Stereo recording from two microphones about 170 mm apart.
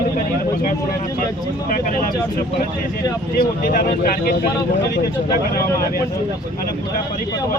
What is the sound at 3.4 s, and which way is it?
Speech, 55° left (ahead or behind).